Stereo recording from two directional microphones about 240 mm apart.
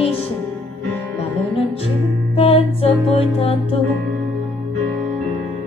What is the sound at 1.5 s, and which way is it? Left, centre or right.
Music, left.